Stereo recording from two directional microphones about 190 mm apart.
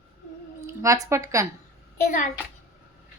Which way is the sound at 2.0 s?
45° left (ahead or behind).